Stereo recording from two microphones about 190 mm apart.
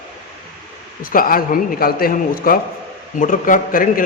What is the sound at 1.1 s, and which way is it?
A man's voice, 50° left (ahead or behind).